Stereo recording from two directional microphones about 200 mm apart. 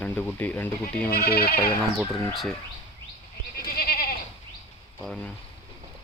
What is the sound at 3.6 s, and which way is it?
Goat, 50° left (ahead or behind).